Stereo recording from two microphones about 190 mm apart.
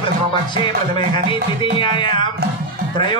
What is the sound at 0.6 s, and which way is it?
Speech, 25° left (ahead or behind).